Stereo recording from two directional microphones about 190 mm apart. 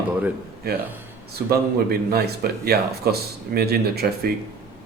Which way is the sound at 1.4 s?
10° right (ahead or behind).